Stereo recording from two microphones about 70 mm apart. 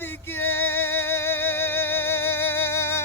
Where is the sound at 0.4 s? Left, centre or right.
Left.